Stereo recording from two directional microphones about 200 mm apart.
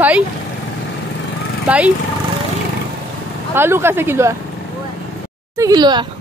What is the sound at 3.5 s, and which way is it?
Speech, 10° right (ahead or behind).